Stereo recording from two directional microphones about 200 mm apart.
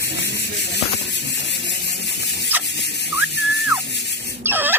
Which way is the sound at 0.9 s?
60° left (ahead or behind).